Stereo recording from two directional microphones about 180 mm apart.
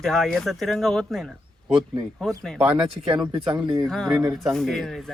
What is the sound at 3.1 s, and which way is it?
Speech, 25° right (ahead or behind).